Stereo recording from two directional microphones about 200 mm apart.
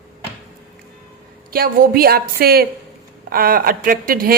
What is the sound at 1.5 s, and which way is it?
A woman's voice, 50° right (ahead or behind).